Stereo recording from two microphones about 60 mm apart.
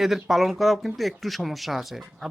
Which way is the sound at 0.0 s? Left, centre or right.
Centre.